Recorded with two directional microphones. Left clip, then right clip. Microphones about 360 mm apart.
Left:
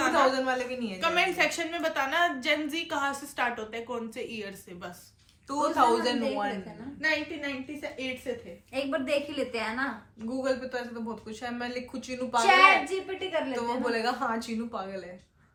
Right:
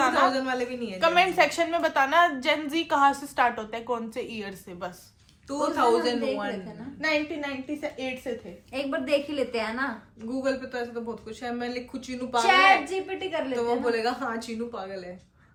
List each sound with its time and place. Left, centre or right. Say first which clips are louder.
0.1 s a woman's voice: right 1 dB; centre
0.9 s a woman's voice: right 5 dB; centre
5.5 s a woman's voice: right 1 dB; centre
7.0 s a woman's voice: right 2 dB; centre